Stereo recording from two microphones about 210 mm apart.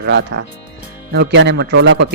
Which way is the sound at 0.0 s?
55° right (ahead or behind).